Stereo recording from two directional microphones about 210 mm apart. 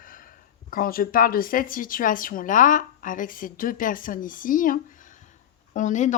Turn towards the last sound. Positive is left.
turn(degrees=35)  # may be behind; listen again after turning